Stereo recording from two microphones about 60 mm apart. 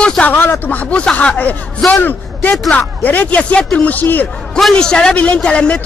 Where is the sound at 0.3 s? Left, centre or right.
Left.